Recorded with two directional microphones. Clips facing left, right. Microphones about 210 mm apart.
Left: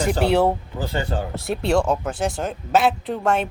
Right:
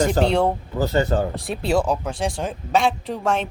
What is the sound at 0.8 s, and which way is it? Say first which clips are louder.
Speech: right 6 dB; 40° right (ahead or behind).